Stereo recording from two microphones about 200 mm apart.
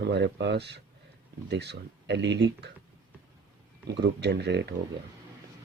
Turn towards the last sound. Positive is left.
turn(degrees=-60)  # may be behind; listen again after turning